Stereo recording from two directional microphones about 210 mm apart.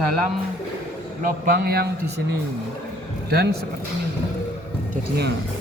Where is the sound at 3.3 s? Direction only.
50° right (ahead or behind).